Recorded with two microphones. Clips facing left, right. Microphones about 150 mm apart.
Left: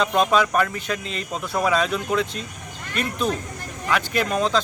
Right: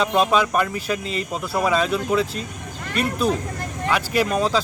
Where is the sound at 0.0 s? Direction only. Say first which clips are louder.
Right 1 dB; 5° right (ahead or behind).